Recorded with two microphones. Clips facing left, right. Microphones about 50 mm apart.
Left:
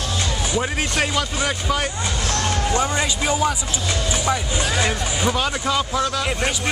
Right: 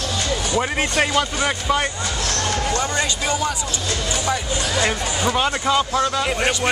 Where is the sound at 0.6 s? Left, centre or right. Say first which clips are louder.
Right 2 dB; centre.